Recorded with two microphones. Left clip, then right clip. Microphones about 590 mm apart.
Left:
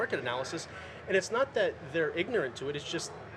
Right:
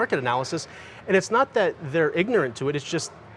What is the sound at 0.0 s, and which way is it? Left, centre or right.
Speech, right.